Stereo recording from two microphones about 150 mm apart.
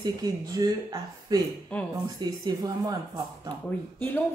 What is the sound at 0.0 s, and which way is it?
Speech, 25° right (ahead or behind).